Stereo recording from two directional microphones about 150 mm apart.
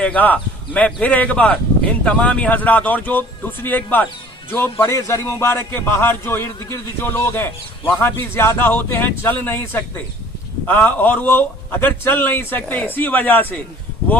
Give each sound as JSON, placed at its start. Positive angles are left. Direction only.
{"t": 0.0, "sound": "a man's voice", "side_deg": 10}